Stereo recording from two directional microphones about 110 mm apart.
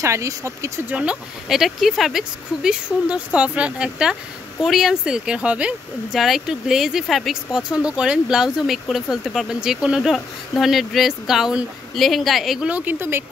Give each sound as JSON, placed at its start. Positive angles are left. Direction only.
{"t": 0.0, "sound": "speech", "side_deg": -30}
{"t": 0.8, "sound": "speech", "side_deg": -10}